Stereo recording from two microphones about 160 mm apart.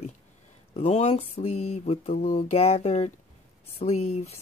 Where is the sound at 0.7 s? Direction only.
40° left (ahead or behind).